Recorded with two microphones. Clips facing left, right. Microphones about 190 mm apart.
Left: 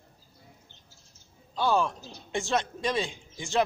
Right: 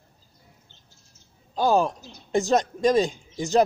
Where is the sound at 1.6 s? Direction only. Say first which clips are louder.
Right 5 dB; 40° right (ahead or behind).